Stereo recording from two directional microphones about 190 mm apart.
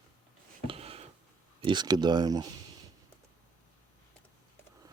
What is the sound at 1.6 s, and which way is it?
Speech, 25° right (ahead or behind).